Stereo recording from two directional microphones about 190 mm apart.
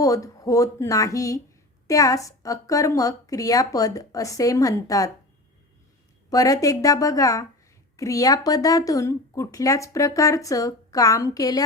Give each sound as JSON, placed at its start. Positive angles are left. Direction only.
{"t": 0.0, "sound": "speech", "side_deg": 15}
{"t": 6.3, "sound": "speech", "side_deg": 20}